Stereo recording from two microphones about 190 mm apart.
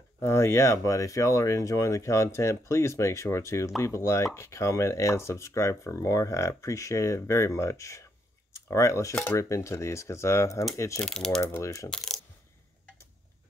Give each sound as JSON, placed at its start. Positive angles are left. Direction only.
{"t": 0.2, "sound": "speech", "side_deg": 15}
{"t": 11.1, "sound": "speech", "side_deg": 5}
{"t": 11.4, "sound": "speech", "side_deg": 15}
{"t": 11.9, "sound": "coin", "side_deg": 0}